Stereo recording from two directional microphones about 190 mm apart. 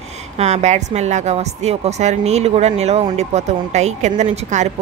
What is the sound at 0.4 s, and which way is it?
A woman's voice, 35° right (ahead or behind).